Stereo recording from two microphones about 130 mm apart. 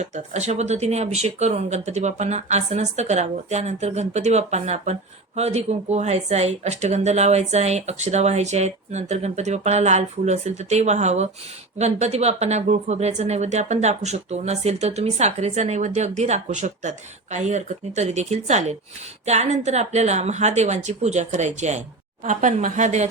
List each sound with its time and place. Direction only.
0.0 s speech: 60° right (ahead or behind)